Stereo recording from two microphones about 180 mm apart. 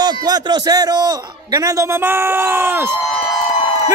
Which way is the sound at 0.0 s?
20° right (ahead or behind).